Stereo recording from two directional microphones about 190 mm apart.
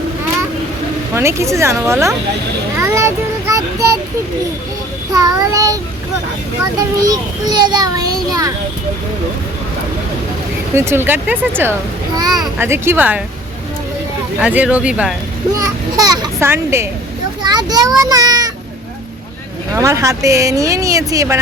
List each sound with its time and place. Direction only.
1.1 s speech: 15° right (ahead or behind)
2.7 s a sound: 15° right (ahead or behind)
5.1 s speech: 15° right (ahead or behind)
7.0 s a child's voice: 20° right (ahead or behind)
10.8 s speech: 10° right (ahead or behind)
14.4 s speech: 5° right (ahead or behind)
15.5 s a child's voice: 20° right (ahead or behind)
19.7 s speech: 15° right (ahead or behind)